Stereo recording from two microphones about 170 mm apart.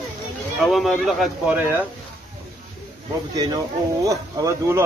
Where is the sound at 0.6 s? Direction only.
Centre (ahead or behind).